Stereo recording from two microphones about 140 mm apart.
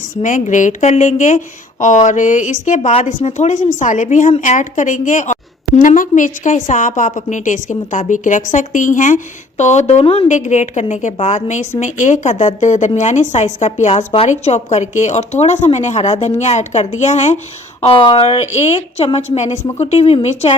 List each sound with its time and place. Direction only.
0.2 s a woman's voice: 60° left (ahead or behind); by 14.3 s 45° left (ahead or behind)
14.3 s a woman's voice: 55° left (ahead or behind)
17.8 s a woman's voice: 40° left (ahead or behind)